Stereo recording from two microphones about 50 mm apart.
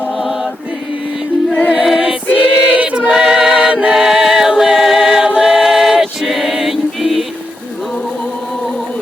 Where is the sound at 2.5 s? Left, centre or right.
Centre.